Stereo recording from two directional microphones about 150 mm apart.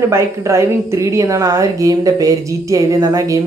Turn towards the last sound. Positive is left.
turn(degrees=-20)  # may be behind; listen again after turning